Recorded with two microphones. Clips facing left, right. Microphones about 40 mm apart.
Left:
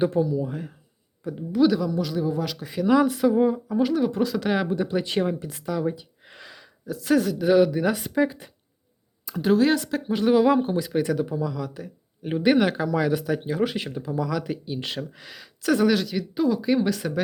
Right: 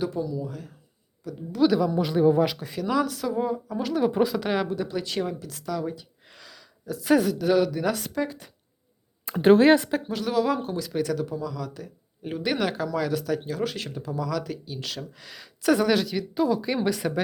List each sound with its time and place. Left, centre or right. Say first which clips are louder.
0.0 s speech: left 6 dB; left
1.5 s speech: left 1 dB; centre
1.9 s speech: right 2 dB; right
2.6 s speech: left 5 dB; centre
4.1 s speech: even; centre
4.7 s speech: left 4 dB; centre
5.6 s a sound: left 3 dB; centre
6.8 s speech: even; centre
7.3 s speech: left 3 dB; centre
9.2 s speech: right 4 dB; right
10.1 s speech: left 7 dB; centre
15.1 s speech: left 1 dB; centre